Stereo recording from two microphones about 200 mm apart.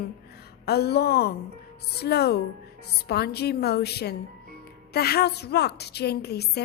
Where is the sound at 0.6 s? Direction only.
55° left (ahead or behind).